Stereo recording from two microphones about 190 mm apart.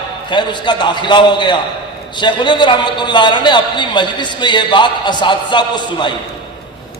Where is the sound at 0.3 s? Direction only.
25° left (ahead or behind).